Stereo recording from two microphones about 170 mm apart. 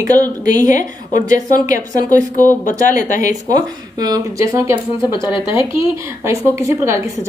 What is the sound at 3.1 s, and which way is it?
Speech, 45° left (ahead or behind).